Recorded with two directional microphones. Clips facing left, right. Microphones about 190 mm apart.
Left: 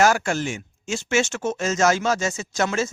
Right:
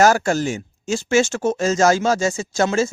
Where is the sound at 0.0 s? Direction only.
40° right (ahead or behind).